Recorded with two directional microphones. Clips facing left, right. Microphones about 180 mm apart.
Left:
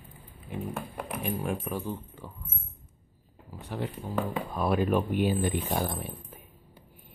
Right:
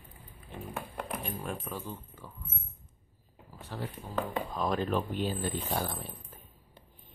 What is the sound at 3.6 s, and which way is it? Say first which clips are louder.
Speech: left 5 dB; 15° left (ahead or behind).